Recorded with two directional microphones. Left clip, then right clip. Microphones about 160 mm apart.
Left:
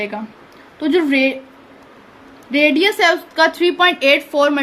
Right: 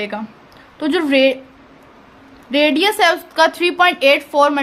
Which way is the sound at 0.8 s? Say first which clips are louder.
Right 1 dB; 50° right (ahead or behind).